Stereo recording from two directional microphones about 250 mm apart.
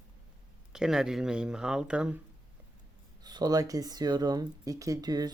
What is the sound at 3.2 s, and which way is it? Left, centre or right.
Speech, centre.